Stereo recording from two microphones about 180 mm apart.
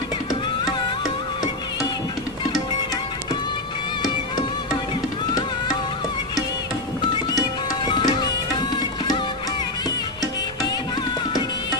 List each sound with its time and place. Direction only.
7.9 s music: 25° left (ahead or behind)